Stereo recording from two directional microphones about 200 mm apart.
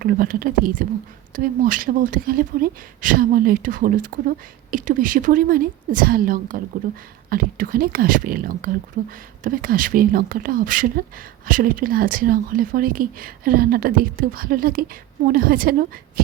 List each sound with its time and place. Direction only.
0.0 s speech: 45° right (ahead or behind)